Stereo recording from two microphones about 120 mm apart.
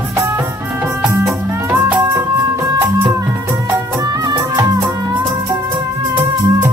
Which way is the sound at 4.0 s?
35° right (ahead or behind).